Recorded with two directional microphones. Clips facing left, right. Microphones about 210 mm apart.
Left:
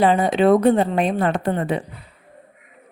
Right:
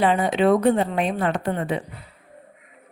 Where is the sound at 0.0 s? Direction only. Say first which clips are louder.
Left 3 dB; 40° left (ahead or behind).